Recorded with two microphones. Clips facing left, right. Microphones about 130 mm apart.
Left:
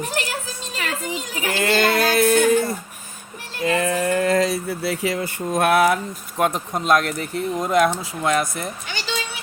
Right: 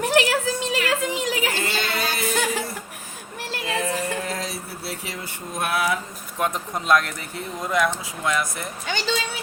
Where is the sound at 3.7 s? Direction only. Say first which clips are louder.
Left 6 dB; 80° left.